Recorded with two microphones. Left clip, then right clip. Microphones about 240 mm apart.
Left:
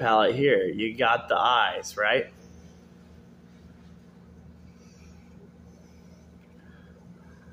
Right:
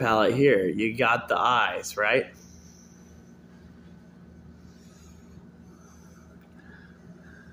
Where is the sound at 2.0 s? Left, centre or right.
Right.